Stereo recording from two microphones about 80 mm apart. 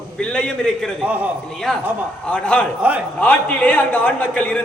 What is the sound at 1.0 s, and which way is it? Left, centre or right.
Speech, centre.